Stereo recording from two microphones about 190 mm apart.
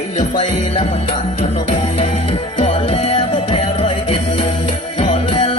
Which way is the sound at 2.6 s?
35° left (ahead or behind).